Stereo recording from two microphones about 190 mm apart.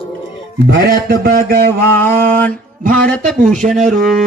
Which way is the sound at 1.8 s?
10° left (ahead or behind).